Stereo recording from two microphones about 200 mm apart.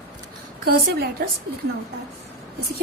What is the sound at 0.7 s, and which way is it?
Speech, 50° right (ahead or behind).